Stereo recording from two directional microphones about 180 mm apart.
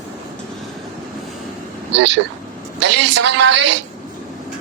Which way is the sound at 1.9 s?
80° right.